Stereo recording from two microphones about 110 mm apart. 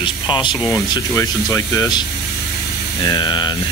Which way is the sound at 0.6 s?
30° left (ahead or behind).